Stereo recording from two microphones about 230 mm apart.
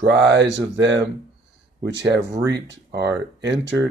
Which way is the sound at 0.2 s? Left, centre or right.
Right.